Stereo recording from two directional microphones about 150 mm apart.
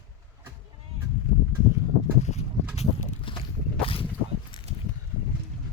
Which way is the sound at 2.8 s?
35° left (ahead or behind).